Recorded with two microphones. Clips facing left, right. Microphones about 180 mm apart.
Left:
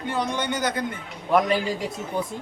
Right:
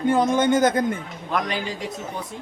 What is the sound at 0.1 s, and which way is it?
Speech, 50° right (ahead or behind).